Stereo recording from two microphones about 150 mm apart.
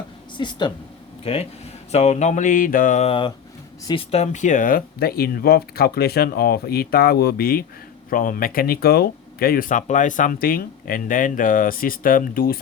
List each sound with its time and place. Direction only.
0.3 s speech: 30° left (ahead or behind); by 7.6 s 85° left
8.1 s speech: 70° left (ahead or behind)